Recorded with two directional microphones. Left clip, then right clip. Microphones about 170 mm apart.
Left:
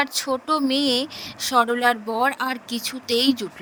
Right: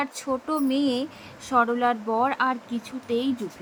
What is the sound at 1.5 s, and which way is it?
Speech, 65° left (ahead or behind).